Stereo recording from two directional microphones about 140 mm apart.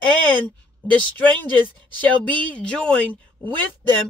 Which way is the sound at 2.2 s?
10° left (ahead or behind).